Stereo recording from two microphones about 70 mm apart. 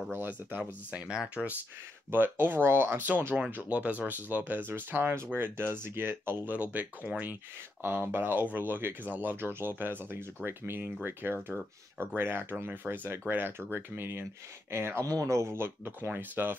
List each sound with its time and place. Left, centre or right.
0.1 s speech: right
0.9 s speech: centre
2.0 s speech: right
6.5 s speech: right